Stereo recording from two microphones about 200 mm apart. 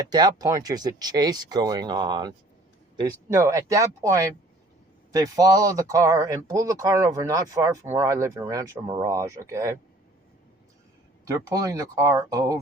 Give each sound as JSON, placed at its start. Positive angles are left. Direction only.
{"t": 0.0, "sound": "speech", "side_deg": -20}
{"t": 11.3, "sound": "speech", "side_deg": -15}